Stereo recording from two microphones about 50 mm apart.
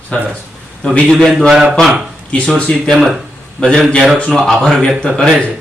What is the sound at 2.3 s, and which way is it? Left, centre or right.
Speech, left.